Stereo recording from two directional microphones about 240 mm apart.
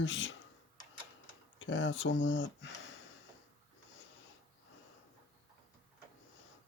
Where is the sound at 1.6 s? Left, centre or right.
Left.